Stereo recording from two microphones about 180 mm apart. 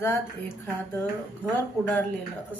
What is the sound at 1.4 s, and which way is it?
Speech, 10° left (ahead or behind).